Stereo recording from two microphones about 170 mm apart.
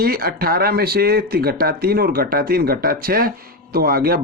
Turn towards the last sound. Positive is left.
turn(degrees=-60)  # may be behind; listen again after turning